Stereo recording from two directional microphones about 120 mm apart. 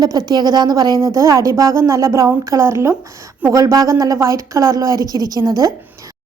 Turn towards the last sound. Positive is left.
turn(degrees=-30)  # may be behind; listen again after turning